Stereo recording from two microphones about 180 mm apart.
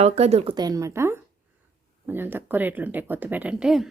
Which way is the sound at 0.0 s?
35° right (ahead or behind).